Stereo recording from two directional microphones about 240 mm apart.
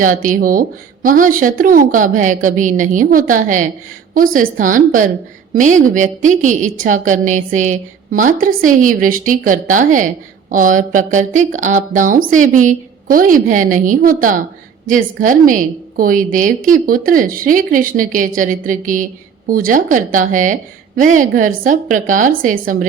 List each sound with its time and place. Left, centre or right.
0.0 s a woman's voice: right